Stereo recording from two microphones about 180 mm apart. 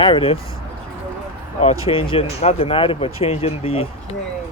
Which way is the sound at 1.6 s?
30° left (ahead or behind).